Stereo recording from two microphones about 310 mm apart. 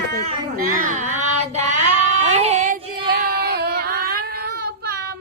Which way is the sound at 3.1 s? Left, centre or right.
Right.